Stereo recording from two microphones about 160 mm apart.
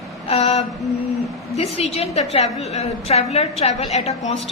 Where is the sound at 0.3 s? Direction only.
40° left (ahead or behind).